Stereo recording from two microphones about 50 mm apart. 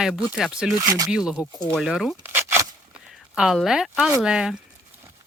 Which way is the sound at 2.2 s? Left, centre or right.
Right.